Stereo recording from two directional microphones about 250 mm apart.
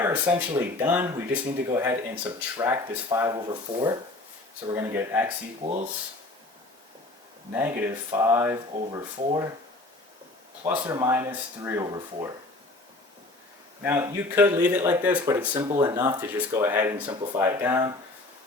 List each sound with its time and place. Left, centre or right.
0.0 s speech: centre
5.6 s speech: right
7.5 s speech: centre
10.7 s speech: centre
13.8 s speech: centre
15.5 s speech: centre
17.1 s speech: right
17.3 s speech: centre